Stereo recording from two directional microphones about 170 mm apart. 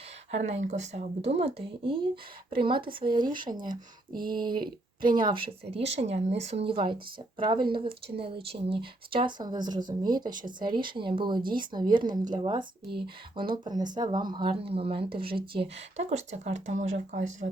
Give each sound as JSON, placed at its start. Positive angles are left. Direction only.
{"t": 0.3, "sound": "speech", "side_deg": -40}
{"t": 3.1, "sound": "speech", "side_deg": -25}
{"t": 4.2, "sound": "speech", "side_deg": -60}
{"t": 5.1, "sound": "speech", "side_deg": -30}